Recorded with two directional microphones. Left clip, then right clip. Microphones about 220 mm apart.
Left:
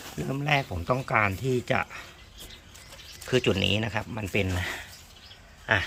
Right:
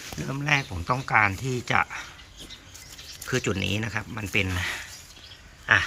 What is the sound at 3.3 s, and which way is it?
Speech, 10° left (ahead or behind).